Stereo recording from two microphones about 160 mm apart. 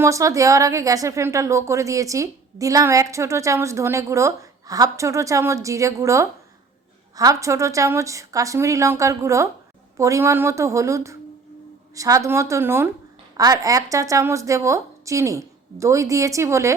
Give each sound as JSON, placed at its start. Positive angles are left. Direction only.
{"t": 0.0, "sound": "a woman's voice", "side_deg": -20}